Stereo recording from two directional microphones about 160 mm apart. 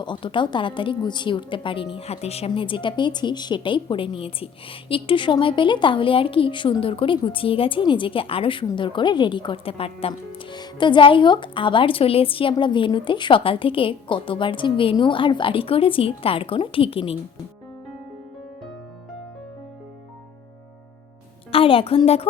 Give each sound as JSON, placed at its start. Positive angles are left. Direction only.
{"t": 0.0, "sound": "a woman's voice", "side_deg": 30}
{"t": 21.5, "sound": "a woman's voice", "side_deg": 35}